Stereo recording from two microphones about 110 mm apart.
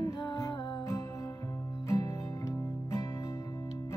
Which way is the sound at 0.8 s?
30° left (ahead or behind).